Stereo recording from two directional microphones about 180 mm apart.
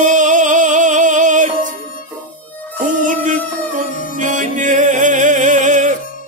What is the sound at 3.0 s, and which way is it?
Music, 45° right (ahead or behind).